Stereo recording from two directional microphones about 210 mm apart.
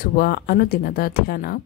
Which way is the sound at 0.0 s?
45° left (ahead or behind).